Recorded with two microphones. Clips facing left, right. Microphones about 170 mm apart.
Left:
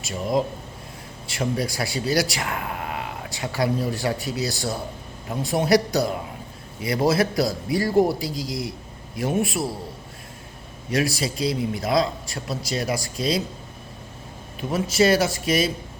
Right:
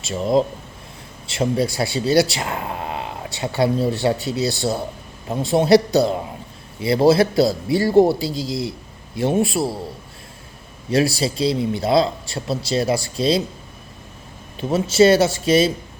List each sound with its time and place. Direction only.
0.0 s speech: 25° right (ahead or behind)
10.9 s speech: 30° right (ahead or behind)
14.6 s speech: 30° right (ahead or behind)